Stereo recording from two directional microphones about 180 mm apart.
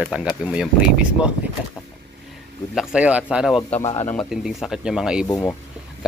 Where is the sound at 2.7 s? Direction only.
5° right (ahead or behind).